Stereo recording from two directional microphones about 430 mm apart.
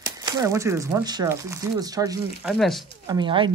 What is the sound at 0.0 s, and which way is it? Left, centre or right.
A woman's voice, centre.